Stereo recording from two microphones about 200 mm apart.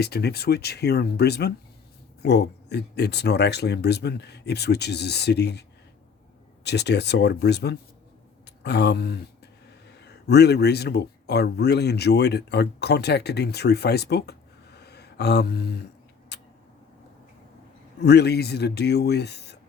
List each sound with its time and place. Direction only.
0.0 s speech: 55° left (ahead or behind)
6.7 s speech: 55° left (ahead or behind)
16.3 s a sound: 55° left (ahead or behind)
18.0 s speech: 55° left (ahead or behind)